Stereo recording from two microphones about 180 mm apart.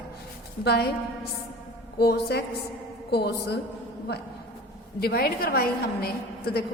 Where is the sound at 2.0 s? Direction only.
65° left (ahead or behind).